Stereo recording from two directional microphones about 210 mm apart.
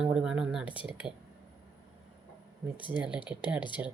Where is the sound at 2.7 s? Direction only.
25° left (ahead or behind).